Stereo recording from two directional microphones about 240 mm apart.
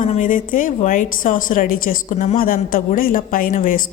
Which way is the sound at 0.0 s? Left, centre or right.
Left.